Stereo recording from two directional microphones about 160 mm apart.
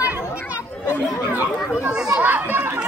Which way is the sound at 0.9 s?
15° left (ahead or behind).